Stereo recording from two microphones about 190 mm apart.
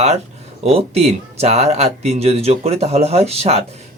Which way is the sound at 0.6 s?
30° right (ahead or behind).